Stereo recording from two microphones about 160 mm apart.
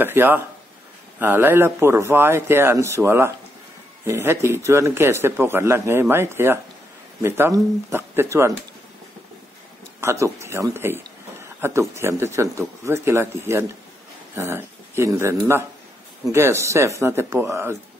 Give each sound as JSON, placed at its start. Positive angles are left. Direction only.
{"t": 0.0, "sound": "a man's voice", "side_deg": -15}
{"t": 9.9, "sound": "a man's voice", "side_deg": -15}